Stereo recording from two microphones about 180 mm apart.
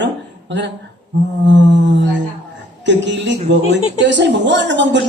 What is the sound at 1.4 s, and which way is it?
Speech, 85° right.